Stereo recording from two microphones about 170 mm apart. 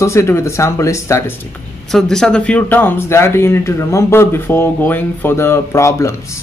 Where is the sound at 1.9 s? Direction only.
5° left (ahead or behind).